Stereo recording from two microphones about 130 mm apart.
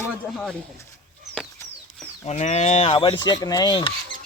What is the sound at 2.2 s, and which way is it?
Speech, 55° left (ahead or behind).